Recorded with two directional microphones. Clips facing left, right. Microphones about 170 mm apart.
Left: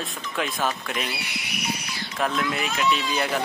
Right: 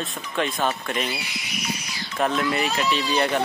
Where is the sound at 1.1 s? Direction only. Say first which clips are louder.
Right 1 dB; 60° left (ahead or behind).